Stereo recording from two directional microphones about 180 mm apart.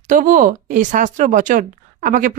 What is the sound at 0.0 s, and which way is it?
Speech, 45° right (ahead or behind).